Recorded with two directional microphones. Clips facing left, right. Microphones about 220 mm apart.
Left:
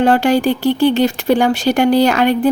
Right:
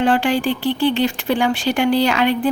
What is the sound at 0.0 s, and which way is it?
A woman's voice, 40° left (ahead or behind).